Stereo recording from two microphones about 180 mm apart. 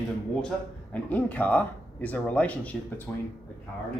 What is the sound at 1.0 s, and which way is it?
Speech, 10° left (ahead or behind).